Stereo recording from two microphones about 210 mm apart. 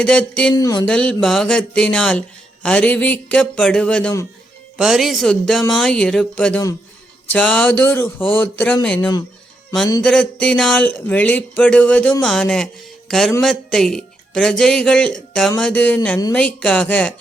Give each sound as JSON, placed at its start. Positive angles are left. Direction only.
{"t": 0.0, "sound": "speech", "side_deg": 5}
{"t": 0.5, "sound": "speech", "side_deg": 20}
{"t": 0.9, "sound": "speech", "side_deg": 5}
{"t": 4.8, "sound": "speech", "side_deg": 0}
{"t": 16.6, "sound": "speech", "side_deg": 5}